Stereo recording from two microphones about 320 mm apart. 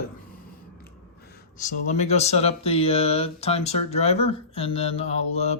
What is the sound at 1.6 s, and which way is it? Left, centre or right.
Speech, left.